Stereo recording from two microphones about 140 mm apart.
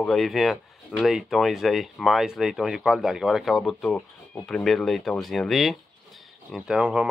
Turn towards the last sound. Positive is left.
turn(degrees=-10)  # may be behind; listen again after turning